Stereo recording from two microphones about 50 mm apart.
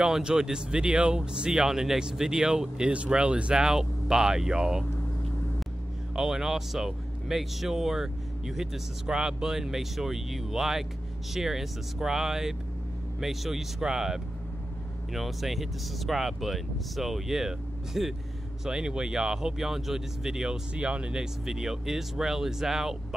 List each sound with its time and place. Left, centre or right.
0.0 s speech: centre
6.1 s speech: centre
20.7 s speech: right